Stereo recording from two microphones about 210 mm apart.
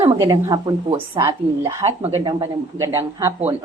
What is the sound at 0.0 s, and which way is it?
Speech, 15° right (ahead or behind).